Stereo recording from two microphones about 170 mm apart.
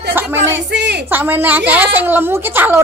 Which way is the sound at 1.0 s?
10° right (ahead or behind).